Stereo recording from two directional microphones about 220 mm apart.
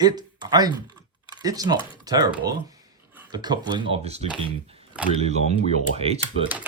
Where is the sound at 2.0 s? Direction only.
15° right (ahead or behind).